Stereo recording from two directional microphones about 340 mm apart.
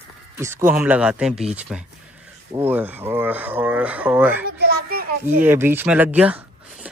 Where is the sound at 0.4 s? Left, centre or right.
Centre.